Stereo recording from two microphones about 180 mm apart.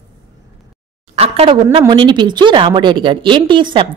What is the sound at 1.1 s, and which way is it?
Speech, 35° right (ahead or behind).